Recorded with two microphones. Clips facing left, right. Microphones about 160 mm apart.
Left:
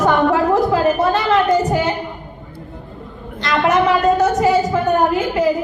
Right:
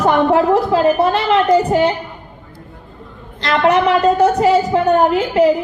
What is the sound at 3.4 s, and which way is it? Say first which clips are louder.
Speech: right 3 dB; 30° right (ahead or behind).